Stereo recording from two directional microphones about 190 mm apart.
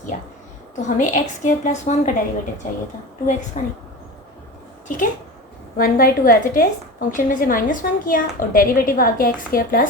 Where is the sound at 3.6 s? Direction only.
40° left (ahead or behind).